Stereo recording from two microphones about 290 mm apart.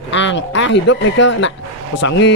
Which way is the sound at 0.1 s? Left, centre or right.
Left.